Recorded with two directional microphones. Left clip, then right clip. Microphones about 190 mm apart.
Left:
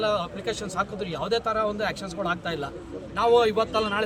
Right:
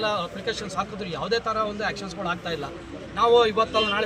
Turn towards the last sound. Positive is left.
turn(degrees=25)  # may be behind; listen again after turning